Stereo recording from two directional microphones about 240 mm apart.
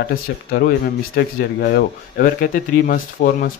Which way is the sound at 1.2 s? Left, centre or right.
Left.